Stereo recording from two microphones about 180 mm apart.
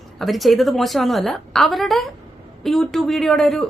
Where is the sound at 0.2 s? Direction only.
Centre (ahead or behind).